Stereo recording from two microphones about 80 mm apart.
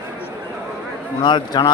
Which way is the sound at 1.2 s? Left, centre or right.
Left.